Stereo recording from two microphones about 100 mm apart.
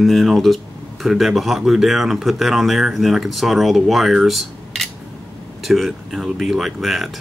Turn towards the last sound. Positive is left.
turn(degrees=0)  # may be behind; listen again after turning